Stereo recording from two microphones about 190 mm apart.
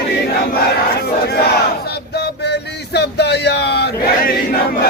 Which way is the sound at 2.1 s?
60° left (ahead or behind).